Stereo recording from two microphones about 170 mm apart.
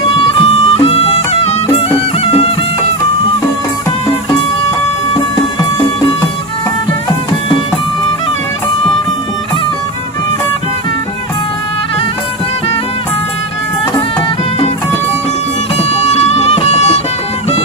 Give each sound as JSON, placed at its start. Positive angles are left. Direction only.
{"t": 0.1, "sound": "music", "side_deg": 35}
{"t": 5.1, "sound": "music", "side_deg": 30}
{"t": 15.8, "sound": "music", "side_deg": 40}